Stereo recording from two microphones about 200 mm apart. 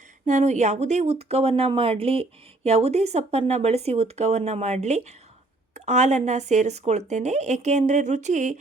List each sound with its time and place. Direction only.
0.3 s speech: 35° right (ahead or behind)